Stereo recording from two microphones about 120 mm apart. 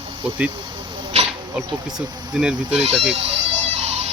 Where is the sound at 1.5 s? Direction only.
5° right (ahead or behind).